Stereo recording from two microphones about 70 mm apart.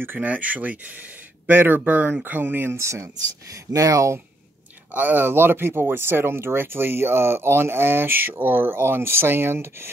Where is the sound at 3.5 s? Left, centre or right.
Right.